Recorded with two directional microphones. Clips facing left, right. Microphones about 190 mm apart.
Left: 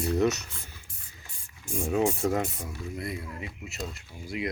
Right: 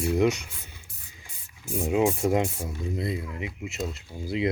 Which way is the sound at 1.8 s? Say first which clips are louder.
Right 2 dB; 15° right (ahead or behind).